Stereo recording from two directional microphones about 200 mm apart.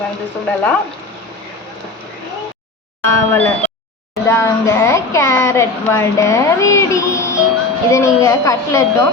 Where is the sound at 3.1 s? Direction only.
15° left (ahead or behind).